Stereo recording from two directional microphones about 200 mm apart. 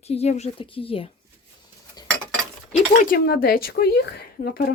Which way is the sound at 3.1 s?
50° left (ahead or behind).